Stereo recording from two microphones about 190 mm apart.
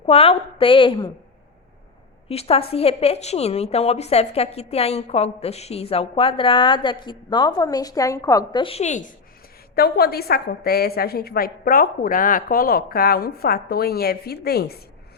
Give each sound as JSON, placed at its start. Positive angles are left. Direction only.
{"t": 0.0, "sound": "a woman's voice", "side_deg": 30}
{"t": 2.3, "sound": "a woman's voice", "side_deg": 30}
{"t": 9.7, "sound": "a woman's voice", "side_deg": 55}